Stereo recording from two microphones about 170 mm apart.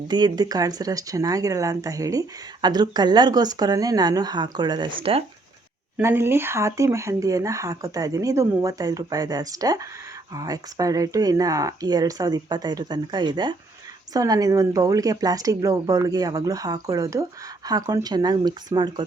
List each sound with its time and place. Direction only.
0.1 s speech: 25° right (ahead or behind)
6.0 s speech: 15° right (ahead or behind)